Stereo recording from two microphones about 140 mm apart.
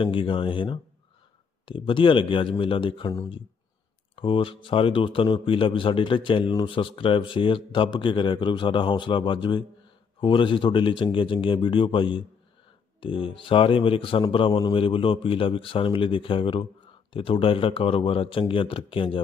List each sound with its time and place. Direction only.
0.0 s a man's voice: 40° left (ahead or behind)